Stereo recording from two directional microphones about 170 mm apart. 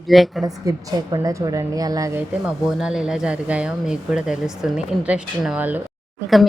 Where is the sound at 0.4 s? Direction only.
20° right (ahead or behind).